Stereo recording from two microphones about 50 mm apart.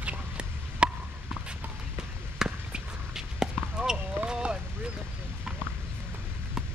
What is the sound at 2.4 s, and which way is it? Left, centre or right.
Basketball bounce, centre.